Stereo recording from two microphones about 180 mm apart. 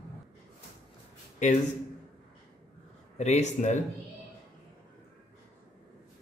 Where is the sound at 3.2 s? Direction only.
40° left (ahead or behind).